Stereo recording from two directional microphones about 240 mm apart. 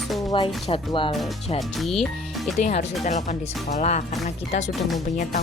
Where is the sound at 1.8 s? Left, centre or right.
Centre.